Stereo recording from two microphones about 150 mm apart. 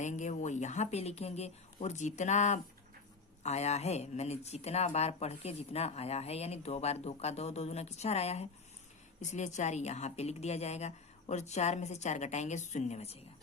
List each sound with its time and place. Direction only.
0.0 s speech: 55° left (ahead or behind)